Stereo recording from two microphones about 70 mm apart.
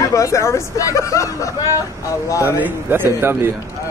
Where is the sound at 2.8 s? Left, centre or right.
Right.